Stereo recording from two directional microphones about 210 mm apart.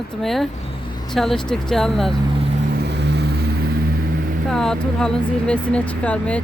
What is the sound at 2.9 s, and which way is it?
Vehicle, 55° right (ahead or behind).